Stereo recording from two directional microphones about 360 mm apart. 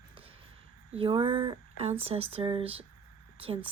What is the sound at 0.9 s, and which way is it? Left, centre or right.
Speech, centre.